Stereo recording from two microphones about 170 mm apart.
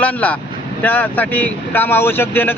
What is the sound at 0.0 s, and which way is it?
Speech, 10° left (ahead or behind).